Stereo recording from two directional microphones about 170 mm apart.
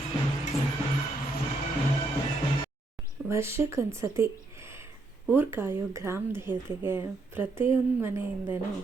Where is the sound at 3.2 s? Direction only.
15° right (ahead or behind).